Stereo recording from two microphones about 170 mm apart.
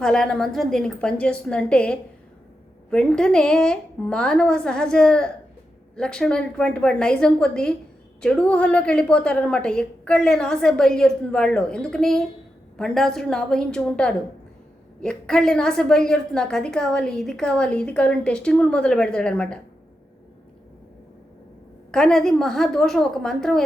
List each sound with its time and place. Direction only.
0.0 s a woman's voice: 5° left (ahead or behind)
21.9 s a woman's voice: 5° left (ahead or behind)